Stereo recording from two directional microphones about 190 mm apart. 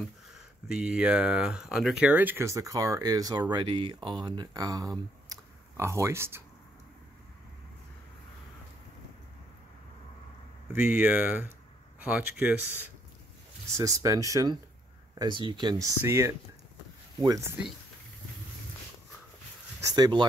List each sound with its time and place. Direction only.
0.0 s speech: 5° right (ahead or behind); by 4.9 s 20° right (ahead or behind)
5.3 s computer keyboard: 15° right (ahead or behind)
10.7 s speech: 10° right (ahead or behind)
19.8 s speech: 20° right (ahead or behind)